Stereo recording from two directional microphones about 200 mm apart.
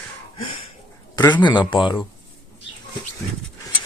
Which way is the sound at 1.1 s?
20° left (ahead or behind).